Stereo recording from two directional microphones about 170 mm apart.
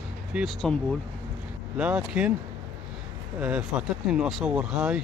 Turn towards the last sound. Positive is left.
turn(degrees=-5)  # may be behind; listen again after turning